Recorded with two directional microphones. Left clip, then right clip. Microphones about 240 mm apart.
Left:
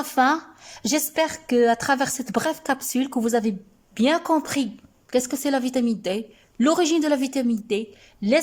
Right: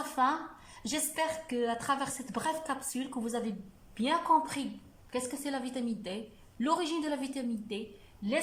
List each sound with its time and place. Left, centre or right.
0.2 s a woman's voice: left